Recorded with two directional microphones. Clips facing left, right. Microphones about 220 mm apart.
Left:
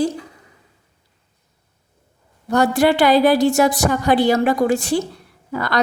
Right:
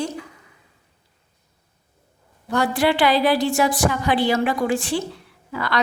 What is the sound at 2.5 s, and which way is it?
Speech, 45° left (ahead or behind).